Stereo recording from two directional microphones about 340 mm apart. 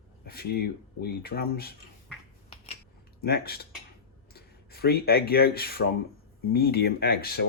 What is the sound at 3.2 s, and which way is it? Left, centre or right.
Speech, left.